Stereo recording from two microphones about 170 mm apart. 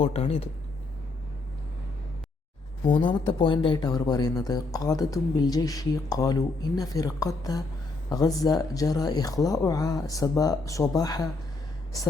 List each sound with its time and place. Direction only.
0.0 s speech: 35° left (ahead or behind)
2.8 s speech: 25° left (ahead or behind)